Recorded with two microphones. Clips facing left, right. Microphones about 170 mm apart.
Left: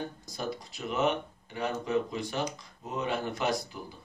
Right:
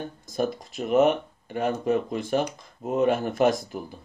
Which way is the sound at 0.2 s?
50° right (ahead or behind).